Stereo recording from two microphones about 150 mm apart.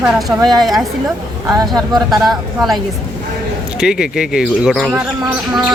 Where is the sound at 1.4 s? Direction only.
25° right (ahead or behind).